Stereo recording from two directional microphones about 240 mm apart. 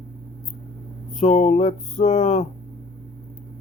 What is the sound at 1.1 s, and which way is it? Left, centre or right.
Speech, left.